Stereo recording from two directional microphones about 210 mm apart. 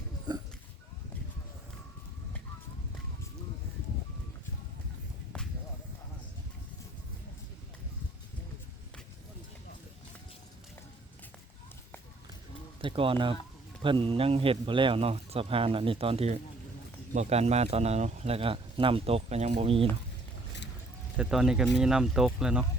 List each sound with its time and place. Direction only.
0.3 s a sound: 20° right (ahead or behind)
12.8 s speech: 25° right (ahead or behind)
21.2 s speech: 5° right (ahead or behind)